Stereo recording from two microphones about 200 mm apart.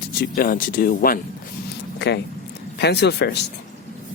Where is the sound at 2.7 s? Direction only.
55° left (ahead or behind).